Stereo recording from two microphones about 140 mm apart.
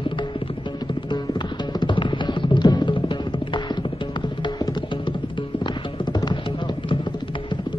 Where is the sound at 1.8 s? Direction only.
35° left (ahead or behind).